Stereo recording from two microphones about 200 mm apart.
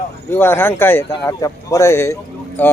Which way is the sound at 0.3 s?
10° left (ahead or behind).